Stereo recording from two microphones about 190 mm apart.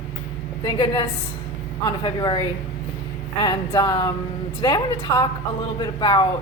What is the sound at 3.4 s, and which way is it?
Speech, 25° left (ahead or behind).